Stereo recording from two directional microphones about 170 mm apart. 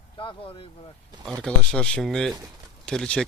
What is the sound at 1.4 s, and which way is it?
Speech, 5° left (ahead or behind).